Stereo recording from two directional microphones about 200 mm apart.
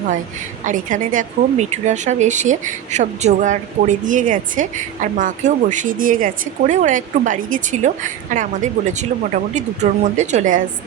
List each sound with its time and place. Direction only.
0.6 s a woman's voice: 40° right (ahead or behind)